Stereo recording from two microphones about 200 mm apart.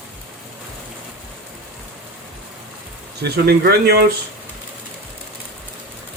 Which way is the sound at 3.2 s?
55° right (ahead or behind).